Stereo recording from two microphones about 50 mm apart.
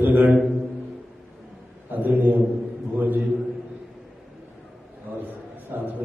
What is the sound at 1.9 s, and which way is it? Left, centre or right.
Speech, right.